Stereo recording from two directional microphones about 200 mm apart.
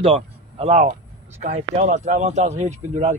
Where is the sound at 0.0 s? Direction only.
30° right (ahead or behind).